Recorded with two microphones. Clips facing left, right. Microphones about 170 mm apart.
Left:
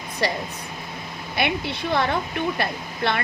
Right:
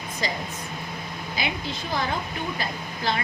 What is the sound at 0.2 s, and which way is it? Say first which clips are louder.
Speech: left 6 dB; 65° left (ahead or behind).